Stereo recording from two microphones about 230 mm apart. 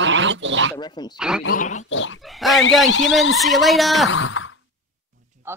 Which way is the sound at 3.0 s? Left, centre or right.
Centre.